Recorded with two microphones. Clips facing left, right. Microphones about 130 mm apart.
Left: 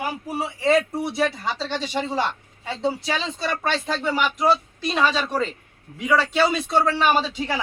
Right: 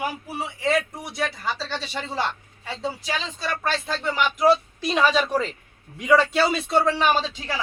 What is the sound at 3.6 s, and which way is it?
Speech, 15° left (ahead or behind).